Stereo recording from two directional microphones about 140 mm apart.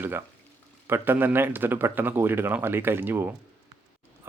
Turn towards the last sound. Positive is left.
turn(degrees=-15)  # may be behind; listen again after turning